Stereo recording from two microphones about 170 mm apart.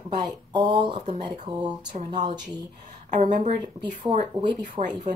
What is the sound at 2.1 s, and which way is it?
Speech, 25° right (ahead or behind).